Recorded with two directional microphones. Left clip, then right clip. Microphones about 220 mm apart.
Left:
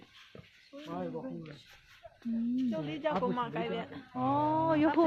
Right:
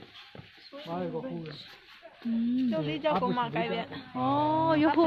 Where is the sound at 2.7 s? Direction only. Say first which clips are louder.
Right 7 dB; 30° right (ahead or behind).